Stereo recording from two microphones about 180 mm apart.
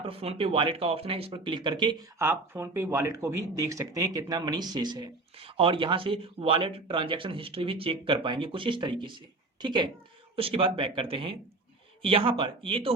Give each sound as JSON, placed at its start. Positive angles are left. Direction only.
{"t": 0.0, "sound": "speech", "side_deg": -30}